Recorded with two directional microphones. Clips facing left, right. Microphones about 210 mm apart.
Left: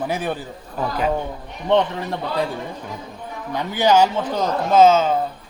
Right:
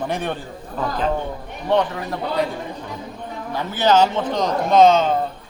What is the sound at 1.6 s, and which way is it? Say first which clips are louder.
Speech: left 1 dB; 25° left (ahead or behind).